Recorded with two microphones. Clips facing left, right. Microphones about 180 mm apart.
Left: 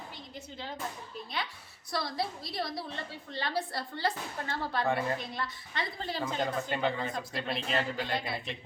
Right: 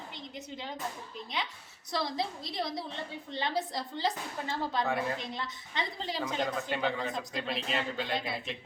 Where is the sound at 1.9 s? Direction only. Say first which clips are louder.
Right 1 dB; 20° right (ahead or behind).